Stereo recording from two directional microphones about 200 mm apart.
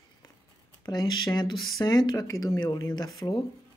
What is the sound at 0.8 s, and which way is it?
Speech, 20° left (ahead or behind).